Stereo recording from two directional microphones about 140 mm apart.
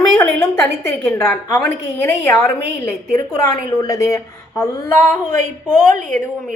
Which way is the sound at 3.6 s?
25° left (ahead or behind).